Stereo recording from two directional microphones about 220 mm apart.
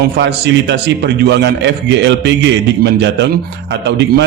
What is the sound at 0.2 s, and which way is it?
A man's voice, 50° right (ahead or behind).